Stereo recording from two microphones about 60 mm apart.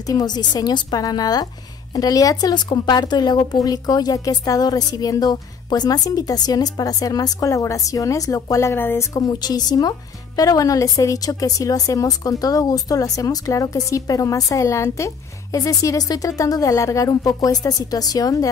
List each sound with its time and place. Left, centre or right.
0.0 s a woman's voice: left
8.7 s speech: left
9.1 s a woman's voice: left
15.5 s a woman's voice: left